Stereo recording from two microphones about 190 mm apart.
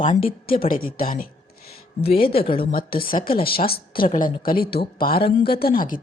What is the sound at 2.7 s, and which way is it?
Speech, 50° left (ahead or behind).